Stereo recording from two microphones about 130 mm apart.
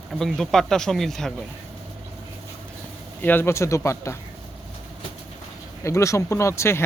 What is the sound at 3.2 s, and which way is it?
Speech, 15° left (ahead or behind).